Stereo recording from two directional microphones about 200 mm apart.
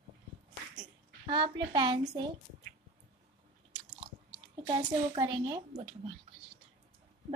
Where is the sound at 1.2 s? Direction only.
25° right (ahead or behind).